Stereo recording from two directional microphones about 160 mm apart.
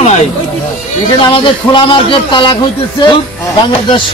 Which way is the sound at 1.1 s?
30° left (ahead or behind).